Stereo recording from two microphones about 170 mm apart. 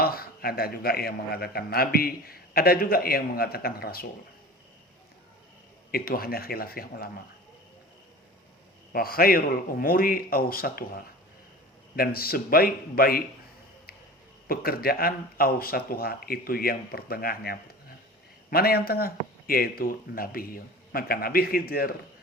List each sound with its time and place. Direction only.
0.0 s a man's voice: 65° left (ahead or behind)
5.9 s a man's voice: 60° left (ahead or behind)
8.9 s a man's voice: 60° left (ahead or behind)
14.4 s a man's voice: 60° left (ahead or behind)